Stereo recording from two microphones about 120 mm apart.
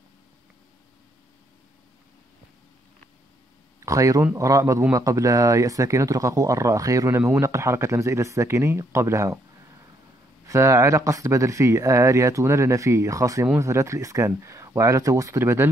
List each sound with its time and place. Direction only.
3.8 s speech: 25° right (ahead or behind)
10.4 s speech: 25° right (ahead or behind)